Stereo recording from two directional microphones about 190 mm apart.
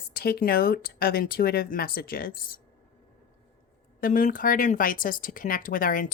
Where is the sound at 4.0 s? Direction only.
45° left (ahead or behind).